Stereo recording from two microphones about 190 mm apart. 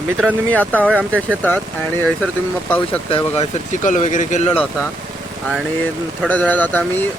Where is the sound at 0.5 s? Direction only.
10° left (ahead or behind).